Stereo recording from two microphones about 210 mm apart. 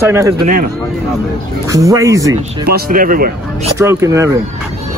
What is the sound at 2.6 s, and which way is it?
Speech, 45° right (ahead or behind).